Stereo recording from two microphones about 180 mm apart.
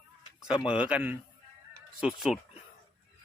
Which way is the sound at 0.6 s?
5° right (ahead or behind).